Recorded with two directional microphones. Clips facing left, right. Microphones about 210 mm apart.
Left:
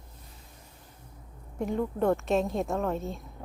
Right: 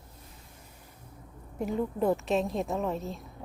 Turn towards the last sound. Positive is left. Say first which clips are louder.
# left 1 dB
turn(degrees=0)  # may be behind; listen again after turning